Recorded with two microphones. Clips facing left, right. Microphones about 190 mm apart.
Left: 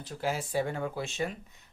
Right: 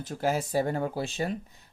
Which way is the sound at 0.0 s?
45° right (ahead or behind).